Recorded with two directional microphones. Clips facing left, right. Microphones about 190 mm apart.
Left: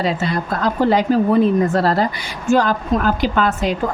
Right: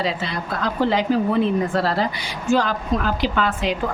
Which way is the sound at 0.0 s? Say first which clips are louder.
Left 5 dB; 45° left (ahead or behind).